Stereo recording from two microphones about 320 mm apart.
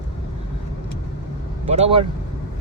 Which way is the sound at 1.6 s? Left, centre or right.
Centre.